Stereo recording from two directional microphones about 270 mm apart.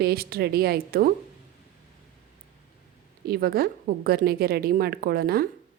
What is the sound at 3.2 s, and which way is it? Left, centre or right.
Speech, right.